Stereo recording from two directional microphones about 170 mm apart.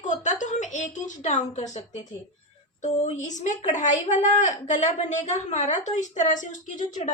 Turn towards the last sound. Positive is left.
turn(degrees=45)  # may be behind; listen again after turning